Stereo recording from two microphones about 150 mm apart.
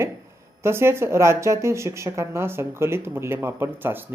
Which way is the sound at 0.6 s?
15° right (ahead or behind).